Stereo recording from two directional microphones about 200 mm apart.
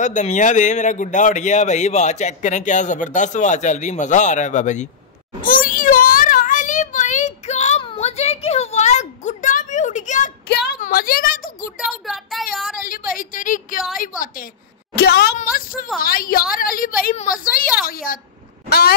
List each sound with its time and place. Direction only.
0.0 s speech: 40° left (ahead or behind)
5.4 s child singing: 45° left (ahead or behind)
10.5 s a sound: 50° left (ahead or behind)
11.8 s a child's voice: centre (ahead or behind)
12.7 s a woman's voice: 45° left (ahead or behind)